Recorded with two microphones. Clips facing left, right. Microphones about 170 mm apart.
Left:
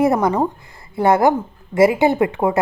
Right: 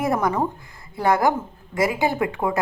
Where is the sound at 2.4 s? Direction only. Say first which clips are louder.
Left 5 dB; 45° left (ahead or behind).